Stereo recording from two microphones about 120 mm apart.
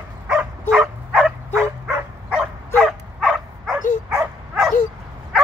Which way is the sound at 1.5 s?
20° right (ahead or behind).